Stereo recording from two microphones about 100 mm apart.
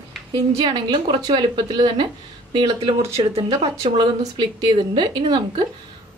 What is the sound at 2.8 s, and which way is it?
Speech, 70° right (ahead or behind).